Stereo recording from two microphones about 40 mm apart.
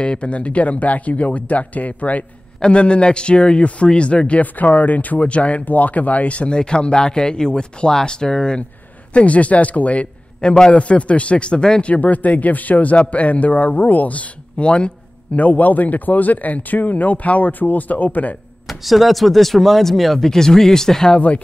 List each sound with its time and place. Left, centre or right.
0.0 s speech: left
2.6 s speech: left
5.2 s speech: left
9.1 s speech: left
10.4 s speech: left
10.7 s speech: left
11.8 s speech: left
14.6 s speech: left
15.3 s speech: left
18.7 s speech: centre